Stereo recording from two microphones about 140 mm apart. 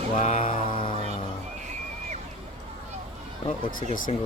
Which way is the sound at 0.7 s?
35° left (ahead or behind).